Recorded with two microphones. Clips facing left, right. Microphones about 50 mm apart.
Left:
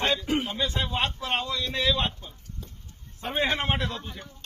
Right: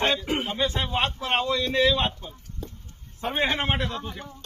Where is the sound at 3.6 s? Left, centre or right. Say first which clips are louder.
Right 2 dB; centre.